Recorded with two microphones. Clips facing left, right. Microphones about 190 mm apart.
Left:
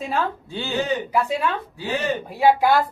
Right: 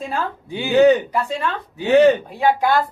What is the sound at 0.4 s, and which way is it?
Speech, 15° right (ahead or behind).